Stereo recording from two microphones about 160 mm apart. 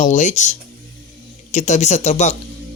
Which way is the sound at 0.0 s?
50° left (ahead or behind).